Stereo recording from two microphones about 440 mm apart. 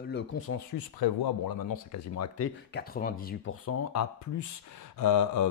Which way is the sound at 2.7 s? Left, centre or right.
Centre.